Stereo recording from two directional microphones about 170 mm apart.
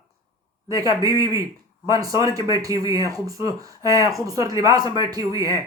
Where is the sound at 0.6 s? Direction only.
20° right (ahead or behind).